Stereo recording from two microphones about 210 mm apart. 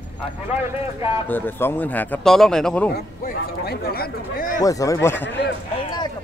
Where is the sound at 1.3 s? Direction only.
10° left (ahead or behind).